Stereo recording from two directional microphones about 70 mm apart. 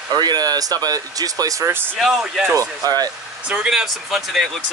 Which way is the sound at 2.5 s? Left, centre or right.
Right.